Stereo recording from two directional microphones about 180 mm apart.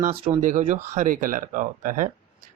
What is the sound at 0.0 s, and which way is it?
Speech, 40° right (ahead or behind).